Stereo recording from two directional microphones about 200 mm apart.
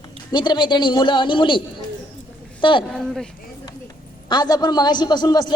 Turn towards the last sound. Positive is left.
turn(degrees=20)  # may be behind; listen again after turning